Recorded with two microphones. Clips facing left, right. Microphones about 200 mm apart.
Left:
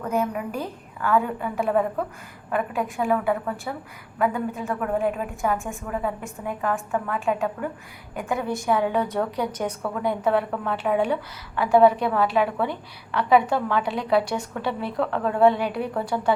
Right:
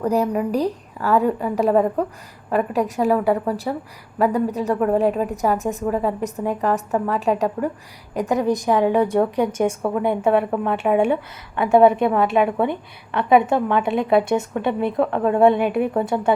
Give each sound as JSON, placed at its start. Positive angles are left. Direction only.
{"t": 0.0, "sound": "a woman's voice", "side_deg": -35}